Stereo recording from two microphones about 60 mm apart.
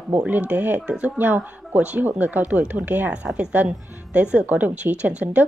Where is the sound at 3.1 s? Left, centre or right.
Centre.